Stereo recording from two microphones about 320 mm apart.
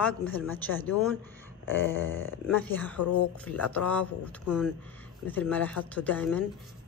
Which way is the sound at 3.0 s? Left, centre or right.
Left.